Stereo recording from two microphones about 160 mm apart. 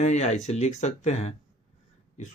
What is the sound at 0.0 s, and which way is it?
Speech, 45° left (ahead or behind).